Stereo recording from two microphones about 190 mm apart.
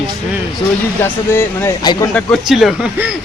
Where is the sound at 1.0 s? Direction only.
10° left (ahead or behind).